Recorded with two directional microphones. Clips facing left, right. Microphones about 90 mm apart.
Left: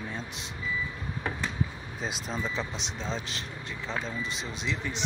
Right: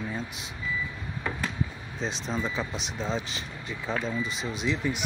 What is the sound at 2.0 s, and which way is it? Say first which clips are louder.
Speech: right 3 dB; 5° left (ahead or behind).